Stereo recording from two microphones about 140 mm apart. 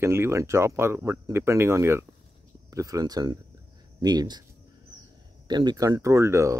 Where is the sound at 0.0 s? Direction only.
20° right (ahead or behind).